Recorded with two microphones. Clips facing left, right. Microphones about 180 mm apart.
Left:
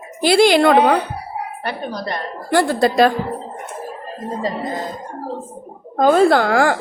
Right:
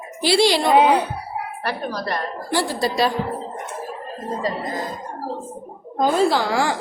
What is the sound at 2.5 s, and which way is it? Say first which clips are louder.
Speech: left 7 dB; 55° left (ahead or behind).